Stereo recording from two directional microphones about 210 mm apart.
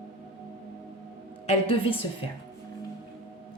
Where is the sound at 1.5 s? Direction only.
25° left (ahead or behind).